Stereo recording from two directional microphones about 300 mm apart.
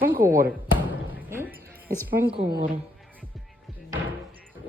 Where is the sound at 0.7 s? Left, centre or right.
Centre.